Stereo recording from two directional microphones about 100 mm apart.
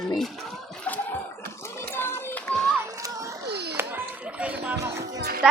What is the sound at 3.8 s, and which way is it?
Music, 20° right (ahead or behind).